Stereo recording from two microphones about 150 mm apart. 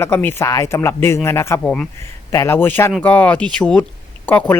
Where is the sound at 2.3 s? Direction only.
20° left (ahead or behind).